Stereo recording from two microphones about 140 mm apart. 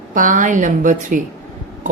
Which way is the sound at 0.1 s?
70° right (ahead or behind).